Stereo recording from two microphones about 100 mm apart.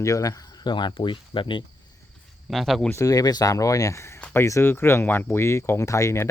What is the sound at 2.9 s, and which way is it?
Speech, 35° left (ahead or behind).